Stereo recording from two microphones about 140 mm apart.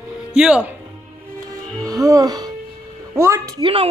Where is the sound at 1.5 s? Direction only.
25° right (ahead or behind).